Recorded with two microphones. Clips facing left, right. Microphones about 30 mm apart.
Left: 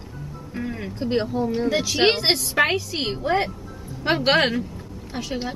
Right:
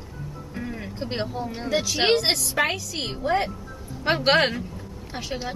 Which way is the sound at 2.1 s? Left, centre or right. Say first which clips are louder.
Even; left.